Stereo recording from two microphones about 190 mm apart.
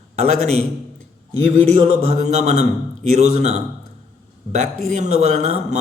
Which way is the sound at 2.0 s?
35° right (ahead or behind).